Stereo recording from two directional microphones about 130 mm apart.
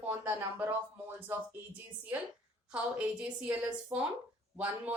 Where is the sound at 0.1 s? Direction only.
20° right (ahead or behind).